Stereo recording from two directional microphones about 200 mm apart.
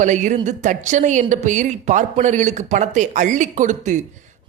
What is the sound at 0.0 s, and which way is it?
A woman's voice, 40° right (ahead or behind).